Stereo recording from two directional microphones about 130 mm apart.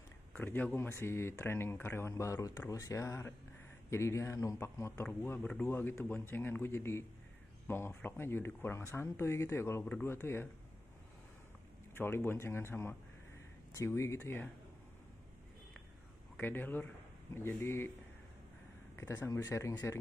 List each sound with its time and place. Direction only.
0.3 s speech: 15° left (ahead or behind)
5.0 s speech: 10° left (ahead or behind)
12.0 s speech: 15° left (ahead or behind)
16.3 s speech: 15° left (ahead or behind)
18.9 s speech: 20° left (ahead or behind)